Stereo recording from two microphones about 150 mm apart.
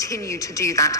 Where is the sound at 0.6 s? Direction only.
20° left (ahead or behind).